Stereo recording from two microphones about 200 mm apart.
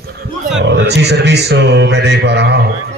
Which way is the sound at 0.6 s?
60° right (ahead or behind).